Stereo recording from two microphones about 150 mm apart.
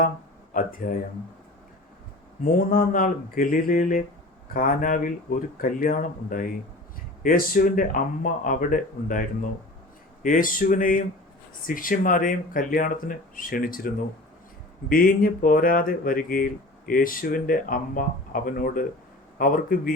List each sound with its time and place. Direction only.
0.5 s speech: 65° left (ahead or behind)
2.4 s speech: 65° left (ahead or behind)